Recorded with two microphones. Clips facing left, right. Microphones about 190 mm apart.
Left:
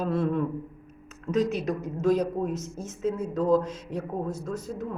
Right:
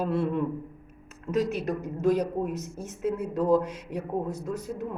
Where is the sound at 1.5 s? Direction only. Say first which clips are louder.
Left 1 dB; 55° right (ahead or behind).